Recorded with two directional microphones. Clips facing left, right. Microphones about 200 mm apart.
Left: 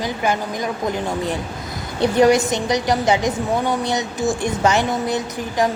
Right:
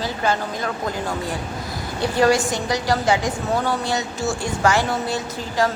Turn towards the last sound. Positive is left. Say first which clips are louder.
# left 2 dB
turn(degrees=15)  # may be behind; listen again after turning